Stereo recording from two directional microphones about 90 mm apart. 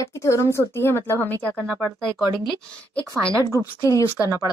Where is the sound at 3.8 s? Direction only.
40° left (ahead or behind).